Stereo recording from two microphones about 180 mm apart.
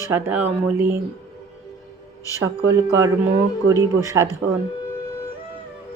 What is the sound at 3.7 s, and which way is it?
Speech, 20° right (ahead or behind).